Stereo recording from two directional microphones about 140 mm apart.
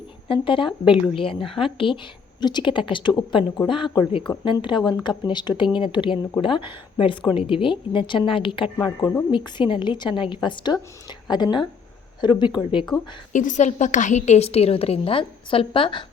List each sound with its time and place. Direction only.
0.3 s a woman's voice: 40° left (ahead or behind)
13.3 s a woman's voice: 65° left (ahead or behind); by 16.0 s 35° left (ahead or behind)